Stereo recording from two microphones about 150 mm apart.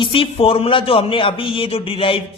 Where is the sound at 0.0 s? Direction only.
35° left (ahead or behind).